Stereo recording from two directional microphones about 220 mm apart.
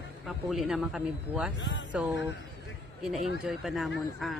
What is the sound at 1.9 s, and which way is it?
Speech, centre (ahead or behind).